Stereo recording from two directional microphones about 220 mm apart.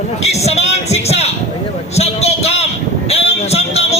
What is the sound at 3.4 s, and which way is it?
Music, 30° left (ahead or behind).